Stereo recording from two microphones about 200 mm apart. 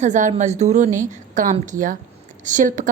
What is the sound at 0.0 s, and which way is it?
A woman's voice, 35° right (ahead or behind).